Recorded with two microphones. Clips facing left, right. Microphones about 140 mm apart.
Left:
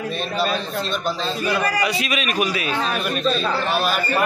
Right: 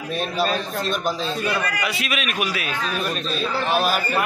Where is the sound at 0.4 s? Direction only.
45° right (ahead or behind).